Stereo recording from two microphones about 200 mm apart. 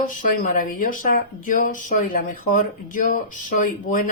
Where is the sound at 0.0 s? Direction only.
40° left (ahead or behind).